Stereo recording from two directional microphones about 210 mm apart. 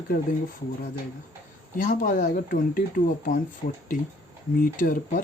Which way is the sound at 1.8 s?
40° left (ahead or behind).